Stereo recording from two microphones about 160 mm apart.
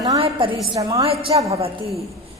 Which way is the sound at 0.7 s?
20° right (ahead or behind).